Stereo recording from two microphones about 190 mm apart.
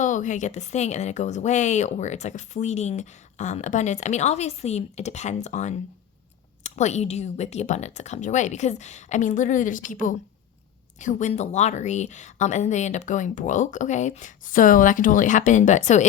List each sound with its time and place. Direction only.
0.0 s speech: 40° left (ahead or behind)